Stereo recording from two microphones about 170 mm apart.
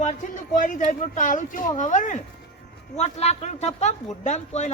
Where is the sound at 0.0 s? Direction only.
50° left (ahead or behind).